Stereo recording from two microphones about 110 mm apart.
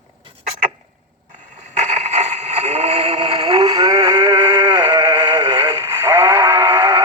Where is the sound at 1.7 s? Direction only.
90° right; by 5.7 s 45° right (ahead or behind).